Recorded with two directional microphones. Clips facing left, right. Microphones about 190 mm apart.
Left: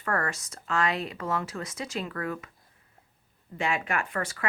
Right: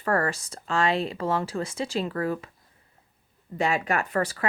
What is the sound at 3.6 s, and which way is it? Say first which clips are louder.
Speech: right 4 dB; 35° right (ahead or behind).